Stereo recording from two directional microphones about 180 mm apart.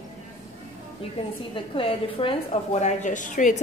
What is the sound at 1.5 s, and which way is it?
A woman's voice, 30° left (ahead or behind).